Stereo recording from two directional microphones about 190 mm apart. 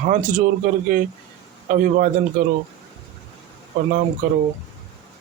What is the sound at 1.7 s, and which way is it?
Speech, 45° right (ahead or behind).